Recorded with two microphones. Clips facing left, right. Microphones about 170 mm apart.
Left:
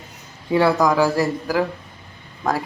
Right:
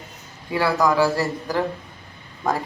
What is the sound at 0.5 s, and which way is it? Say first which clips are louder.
A man's voice: left 3 dB; 20° left (ahead or behind).